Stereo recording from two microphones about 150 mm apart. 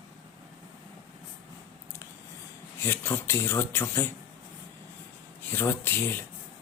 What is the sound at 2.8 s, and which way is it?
Speech, 15° left (ahead or behind).